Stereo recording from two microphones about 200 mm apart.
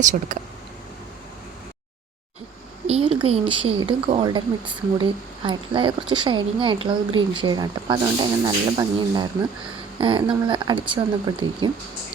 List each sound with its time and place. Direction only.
0.0 s speech: 40° right (ahead or behind)
2.8 s speech: 30° right (ahead or behind)